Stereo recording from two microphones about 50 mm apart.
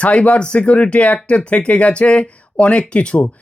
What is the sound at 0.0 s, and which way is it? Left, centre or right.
Speech, left.